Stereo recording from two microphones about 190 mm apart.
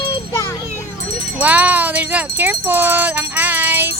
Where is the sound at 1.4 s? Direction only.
10° right (ahead or behind).